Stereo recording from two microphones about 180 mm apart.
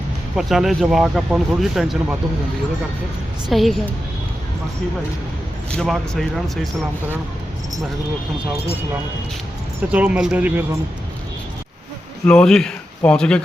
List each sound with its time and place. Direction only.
0.3 s speech: centre (ahead or behind)
3.5 s speech: centre (ahead or behind)
5.7 s speech: centre (ahead or behind)
9.9 s speech: 5° right (ahead or behind)
12.2 s speech: 5° left (ahead or behind)